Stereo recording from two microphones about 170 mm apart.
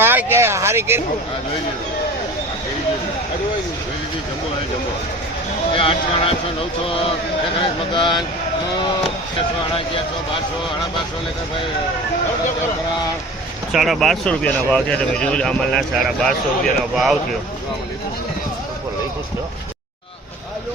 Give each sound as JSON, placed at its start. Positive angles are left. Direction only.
{"t": 0.0, "sound": "speech", "side_deg": -10}
{"t": 5.7, "sound": "speech", "side_deg": 35}
{"t": 13.7, "sound": "speech", "side_deg": 0}